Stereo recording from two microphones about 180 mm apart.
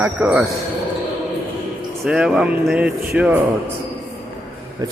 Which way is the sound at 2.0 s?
5° right (ahead or behind).